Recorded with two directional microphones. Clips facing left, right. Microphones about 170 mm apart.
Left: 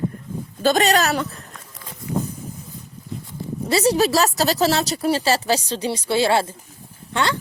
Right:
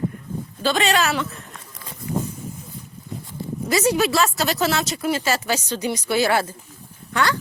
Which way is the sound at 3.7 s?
35° left (ahead or behind).